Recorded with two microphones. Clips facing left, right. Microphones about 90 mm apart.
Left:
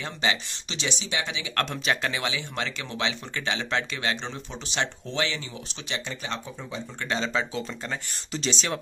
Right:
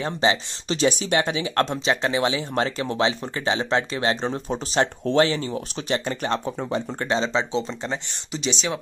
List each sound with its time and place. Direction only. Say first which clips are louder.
0.0 s speech: right 6 dB; 35° right (ahead or behind); by 6.8 s 50° right (ahead or behind)
7.0 s speech: right 3 dB; 25° right (ahead or behind)